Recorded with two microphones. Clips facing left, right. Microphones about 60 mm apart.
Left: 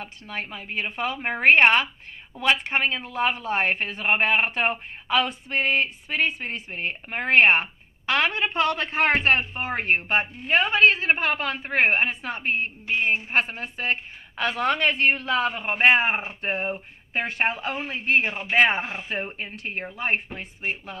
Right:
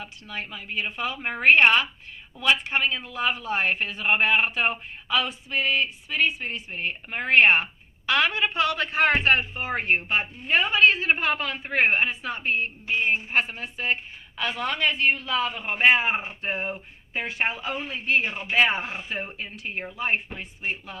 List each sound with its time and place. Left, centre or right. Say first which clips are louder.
0.0 s speech: left 2 dB; left